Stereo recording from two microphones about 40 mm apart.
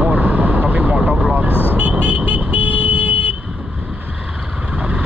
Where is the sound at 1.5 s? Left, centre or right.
Left.